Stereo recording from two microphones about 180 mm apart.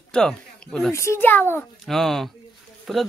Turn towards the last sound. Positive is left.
turn(degrees=0)  # may be behind; listen again after turning